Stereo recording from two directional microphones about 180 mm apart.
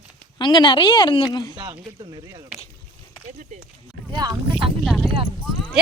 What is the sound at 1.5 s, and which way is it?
Speech, 25° right (ahead or behind).